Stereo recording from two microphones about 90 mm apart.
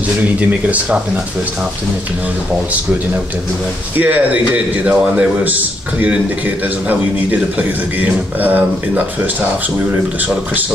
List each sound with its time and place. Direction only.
0.5 s speech: 15° right (ahead or behind)
4.0 s speech: 15° right (ahead or behind)